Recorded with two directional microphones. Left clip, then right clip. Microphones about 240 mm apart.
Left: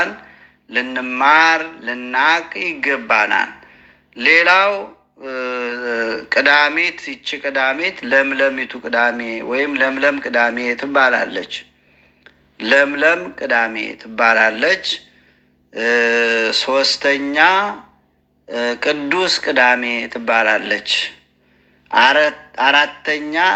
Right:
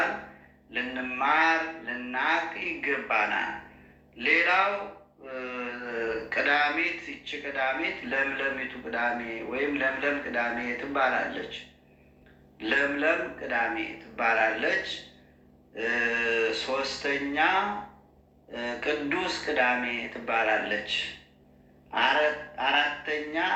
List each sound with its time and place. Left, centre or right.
0.7 s speech: left